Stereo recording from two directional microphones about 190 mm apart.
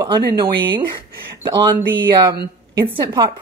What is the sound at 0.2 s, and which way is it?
Speech, 60° right (ahead or behind).